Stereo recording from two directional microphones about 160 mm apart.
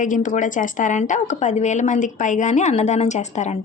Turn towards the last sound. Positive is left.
turn(degrees=45)  # may be behind; listen again after turning